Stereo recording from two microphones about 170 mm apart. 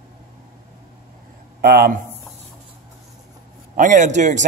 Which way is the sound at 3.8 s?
50° right (ahead or behind).